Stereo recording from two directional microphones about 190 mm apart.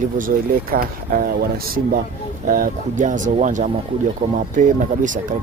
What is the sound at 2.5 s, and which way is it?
Speech, 45° right (ahead or behind).